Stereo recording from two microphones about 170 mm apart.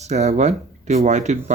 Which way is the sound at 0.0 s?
40° right (ahead or behind).